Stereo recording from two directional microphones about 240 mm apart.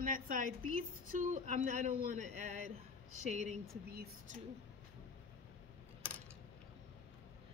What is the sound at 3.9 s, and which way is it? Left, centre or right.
Speech, right.